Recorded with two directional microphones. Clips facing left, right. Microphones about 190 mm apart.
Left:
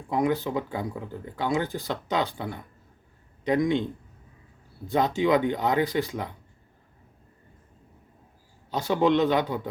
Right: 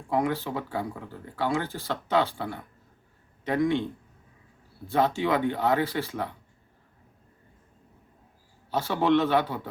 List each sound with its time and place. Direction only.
0.1 s speech: 15° left (ahead or behind)
4.9 s speech: 15° left (ahead or behind)
8.7 s speech: 15° left (ahead or behind)